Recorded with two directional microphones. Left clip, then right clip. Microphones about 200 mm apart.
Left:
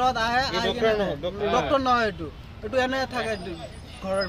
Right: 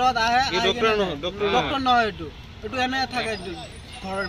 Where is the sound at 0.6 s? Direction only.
40° right (ahead or behind).